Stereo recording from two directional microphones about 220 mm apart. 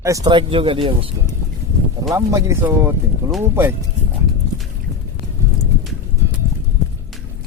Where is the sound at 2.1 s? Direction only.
15° right (ahead or behind).